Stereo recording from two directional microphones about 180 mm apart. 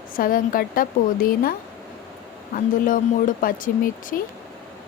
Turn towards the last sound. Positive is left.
turn(degrees=50)  # may be behind; listen again after turning